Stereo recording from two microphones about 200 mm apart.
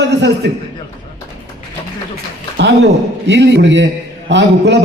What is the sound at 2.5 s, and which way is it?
Speech, 60° right (ahead or behind).